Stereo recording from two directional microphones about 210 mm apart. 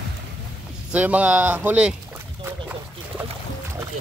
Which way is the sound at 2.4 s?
10° right (ahead or behind).